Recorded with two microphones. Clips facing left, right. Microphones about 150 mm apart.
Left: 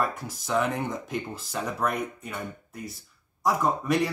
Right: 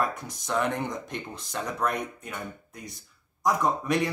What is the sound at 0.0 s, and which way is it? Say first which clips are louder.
Speech: even; 5° left (ahead or behind).